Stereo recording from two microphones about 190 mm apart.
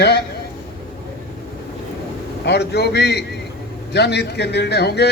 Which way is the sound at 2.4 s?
60° left (ahead or behind).